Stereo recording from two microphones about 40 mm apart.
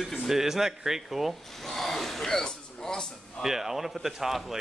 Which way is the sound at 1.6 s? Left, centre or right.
Centre.